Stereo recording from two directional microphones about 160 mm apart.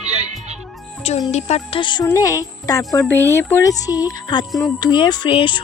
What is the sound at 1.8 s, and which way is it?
Speech, 30° left (ahead or behind).